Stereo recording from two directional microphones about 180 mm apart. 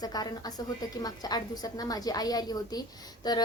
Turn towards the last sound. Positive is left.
turn(degrees=20)  # may be behind; listen again after turning